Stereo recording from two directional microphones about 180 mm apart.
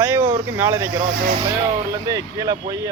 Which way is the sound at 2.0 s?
20° right (ahead or behind).